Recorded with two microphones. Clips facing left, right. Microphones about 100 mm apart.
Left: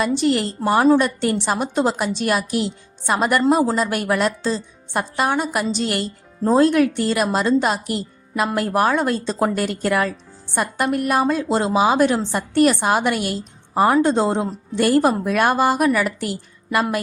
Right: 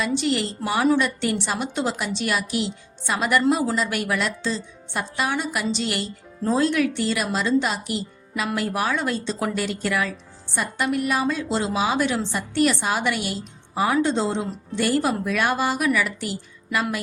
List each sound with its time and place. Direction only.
0.0 s speech: 45° left (ahead or behind)